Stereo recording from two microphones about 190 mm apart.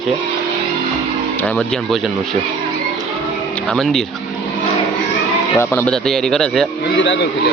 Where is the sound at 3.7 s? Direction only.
Centre (ahead or behind).